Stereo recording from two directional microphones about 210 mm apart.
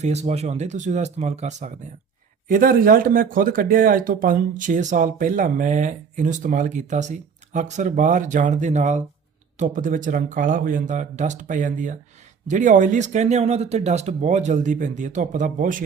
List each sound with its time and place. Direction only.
0.0 s speech: 30° right (ahead or behind)